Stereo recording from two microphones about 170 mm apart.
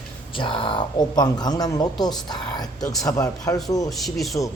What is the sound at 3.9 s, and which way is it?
Speech, centre (ahead or behind).